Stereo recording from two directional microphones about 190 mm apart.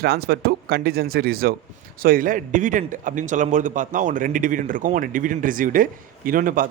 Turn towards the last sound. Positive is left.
turn(degrees=-45)  # may be behind; listen again after turning